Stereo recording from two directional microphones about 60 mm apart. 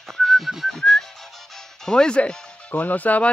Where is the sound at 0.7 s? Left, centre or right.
Centre.